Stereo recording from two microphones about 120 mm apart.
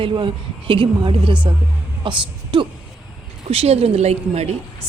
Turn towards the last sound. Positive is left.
turn(degrees=-65)  # may be behind; listen again after turning